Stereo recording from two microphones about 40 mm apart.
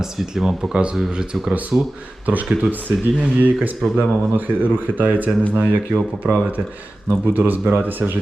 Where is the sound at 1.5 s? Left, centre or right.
Right.